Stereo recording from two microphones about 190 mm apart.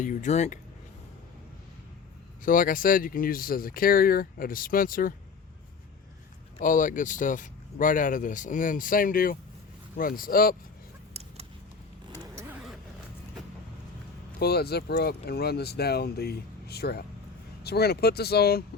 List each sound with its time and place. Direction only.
0.0 s speech: 40° left (ahead or behind)
2.4 s speech: 45° left (ahead or behind)
6.6 s speech: 45° left (ahead or behind)
12.2 s vehicle: 15° right (ahead or behind)
14.3 s speech: 55° left (ahead or behind)